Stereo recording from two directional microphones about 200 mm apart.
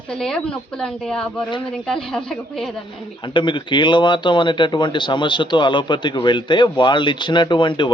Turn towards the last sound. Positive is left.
turn(degrees=25)  # may be behind; listen again after turning